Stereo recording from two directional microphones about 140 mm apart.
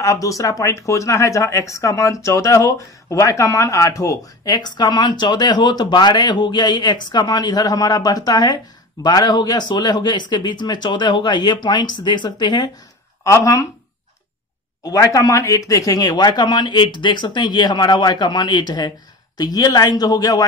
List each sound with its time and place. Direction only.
0.0 s speech: 25° left (ahead or behind)
14.8 s speech: 25° left (ahead or behind)